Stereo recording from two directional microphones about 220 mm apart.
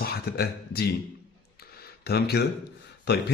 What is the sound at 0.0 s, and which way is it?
Speech, 45° left (ahead or behind).